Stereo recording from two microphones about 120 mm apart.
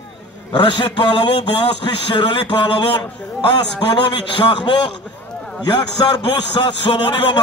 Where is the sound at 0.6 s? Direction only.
40° left (ahead or behind).